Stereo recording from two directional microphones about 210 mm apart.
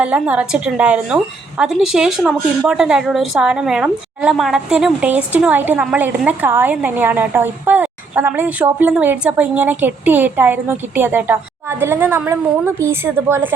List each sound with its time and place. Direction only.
0.0 s a woman's voice: 5° right (ahead or behind)